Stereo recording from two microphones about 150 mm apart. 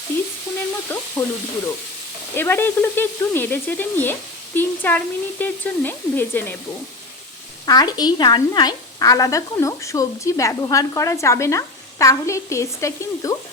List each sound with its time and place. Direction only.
1.2 s speech: 10° left (ahead or behind)
7.6 s a woman's voice: 25° left (ahead or behind)